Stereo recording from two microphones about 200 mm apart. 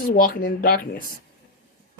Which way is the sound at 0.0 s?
45° left (ahead or behind).